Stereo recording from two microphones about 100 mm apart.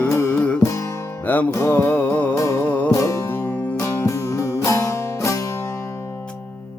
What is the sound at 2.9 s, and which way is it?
Music, 30° left (ahead or behind).